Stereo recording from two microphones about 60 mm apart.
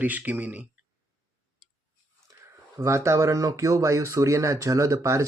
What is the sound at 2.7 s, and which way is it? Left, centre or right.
Speech, right.